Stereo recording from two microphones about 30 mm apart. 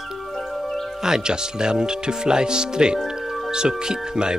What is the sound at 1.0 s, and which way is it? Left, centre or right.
Speech, right.